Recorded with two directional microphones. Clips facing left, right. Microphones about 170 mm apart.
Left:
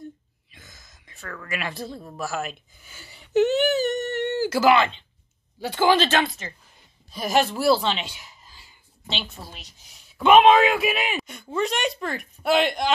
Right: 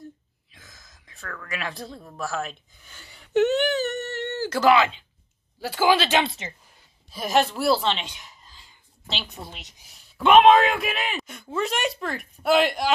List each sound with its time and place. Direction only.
0.5 s a sound: centre (ahead or behind)
2.0 s speech: 5° left (ahead or behind)
6.2 s a woman's voice: 25° right (ahead or behind)
7.1 s speech: centre (ahead or behind)
9.3 s a woman's voice: 20° right (ahead or behind)
9.8 s speech: centre (ahead or behind)
11.1 s speech: centre (ahead or behind)